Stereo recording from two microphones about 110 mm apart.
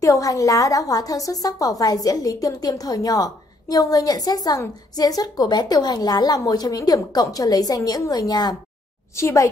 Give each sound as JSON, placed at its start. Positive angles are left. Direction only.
{"t": 0.0, "sound": "a woman's voice", "side_deg": 30}
{"t": 9.1, "sound": "a woman's voice", "side_deg": 25}